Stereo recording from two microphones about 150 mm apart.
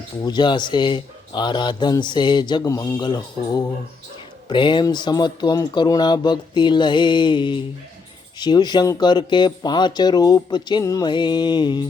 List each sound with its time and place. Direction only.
0.3 s speech: 30° left (ahead or behind)